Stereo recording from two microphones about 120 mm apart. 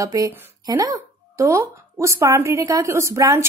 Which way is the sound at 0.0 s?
30° right (ahead or behind).